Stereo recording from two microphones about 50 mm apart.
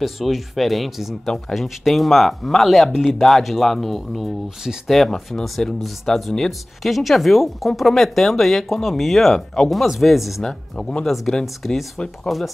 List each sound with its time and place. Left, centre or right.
0.0 s speech: centre
10.4 s speech: centre
11.4 s speech: centre